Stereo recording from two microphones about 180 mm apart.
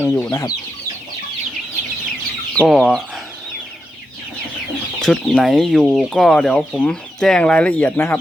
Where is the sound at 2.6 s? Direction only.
Centre (ahead or behind).